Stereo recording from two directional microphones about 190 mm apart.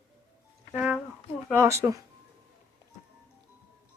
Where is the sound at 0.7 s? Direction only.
5° right (ahead or behind).